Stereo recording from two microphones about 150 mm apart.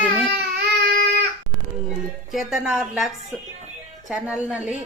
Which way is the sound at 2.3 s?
Centre (ahead or behind).